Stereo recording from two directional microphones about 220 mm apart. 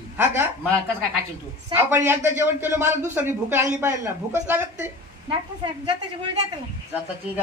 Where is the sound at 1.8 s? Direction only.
10° right (ahead or behind).